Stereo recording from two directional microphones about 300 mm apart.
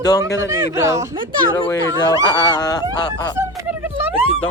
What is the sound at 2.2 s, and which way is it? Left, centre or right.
Goose, centre.